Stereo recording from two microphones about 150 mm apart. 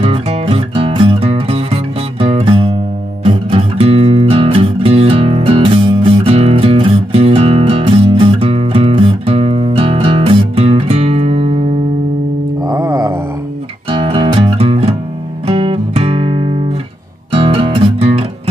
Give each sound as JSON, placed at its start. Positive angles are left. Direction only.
{"t": 0.0, "sound": "music", "side_deg": -40}
{"t": 12.6, "sound": "music", "side_deg": -25}
{"t": 13.8, "sound": "music", "side_deg": -35}
{"t": 15.4, "sound": "guitar", "side_deg": -40}
{"t": 17.4, "sound": "music", "side_deg": -40}